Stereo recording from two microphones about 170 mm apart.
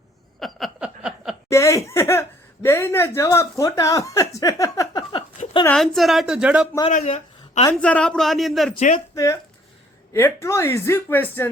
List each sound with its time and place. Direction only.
0.3 s a sound: centre (ahead or behind)
1.5 s speech: 15° left (ahead or behind)
5.6 s a woman's voice: 5° left (ahead or behind)
6.9 s a sound: 45° left (ahead or behind)
7.7 s a woman's voice: 10° left (ahead or behind)
8.7 s speech: 45° left (ahead or behind)
9.1 s speech: 20° left (ahead or behind)